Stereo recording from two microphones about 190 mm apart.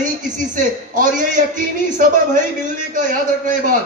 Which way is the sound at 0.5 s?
45° right (ahead or behind).